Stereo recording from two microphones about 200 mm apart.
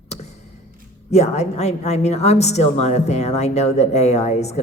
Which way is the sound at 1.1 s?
35° left (ahead or behind).